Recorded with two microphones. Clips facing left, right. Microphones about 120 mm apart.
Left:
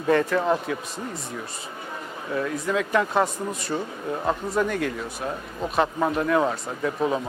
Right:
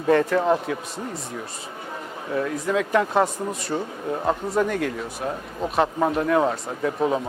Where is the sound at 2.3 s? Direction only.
35° right (ahead or behind).